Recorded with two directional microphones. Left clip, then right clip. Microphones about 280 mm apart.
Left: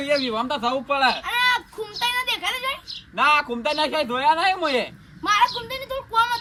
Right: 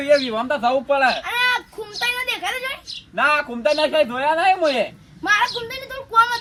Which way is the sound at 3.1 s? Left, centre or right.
Centre.